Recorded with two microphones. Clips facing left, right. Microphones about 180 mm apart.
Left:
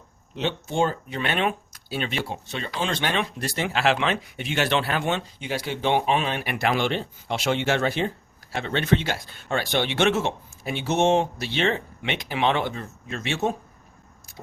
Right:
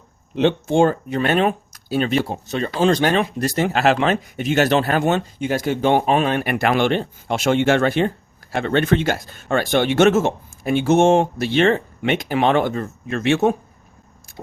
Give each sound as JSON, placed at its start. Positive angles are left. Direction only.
{"t": 0.3, "sound": "speech", "side_deg": -55}